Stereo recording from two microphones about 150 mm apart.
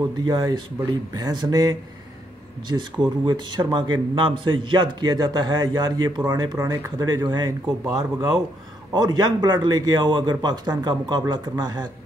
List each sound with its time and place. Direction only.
0.2 s speech: 30° right (ahead or behind)